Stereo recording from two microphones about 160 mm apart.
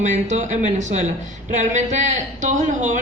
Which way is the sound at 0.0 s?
50° right (ahead or behind).